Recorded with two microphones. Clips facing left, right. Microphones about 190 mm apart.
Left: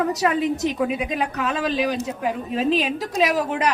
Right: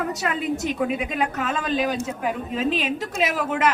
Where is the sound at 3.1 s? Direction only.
35° left (ahead or behind).